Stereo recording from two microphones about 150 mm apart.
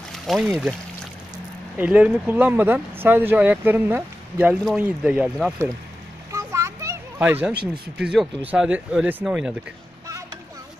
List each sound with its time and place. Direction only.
0.1 s speech: centre (ahead or behind)
1.8 s speech: 10° right (ahead or behind)
6.3 s children playing: 20° right (ahead or behind)
8.0 s speech: 5° right (ahead or behind)